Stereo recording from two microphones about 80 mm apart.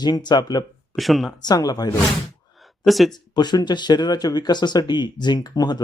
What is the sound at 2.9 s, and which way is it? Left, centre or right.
Speech, centre.